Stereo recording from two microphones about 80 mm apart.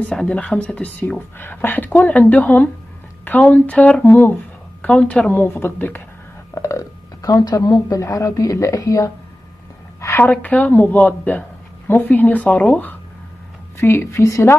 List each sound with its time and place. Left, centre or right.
0.1 s speech: centre
4.0 s speech: left
4.8 s speech: centre
5.3 s speech: left
6.5 s speech: left
10.1 s speech: left
13.7 s a woman's voice: left